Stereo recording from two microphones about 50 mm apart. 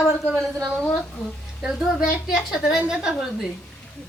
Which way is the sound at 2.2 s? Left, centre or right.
Centre.